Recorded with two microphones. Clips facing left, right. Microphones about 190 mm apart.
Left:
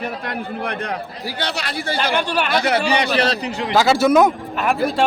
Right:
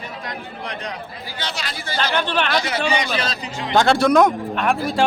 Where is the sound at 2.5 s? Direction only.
60° left (ahead or behind).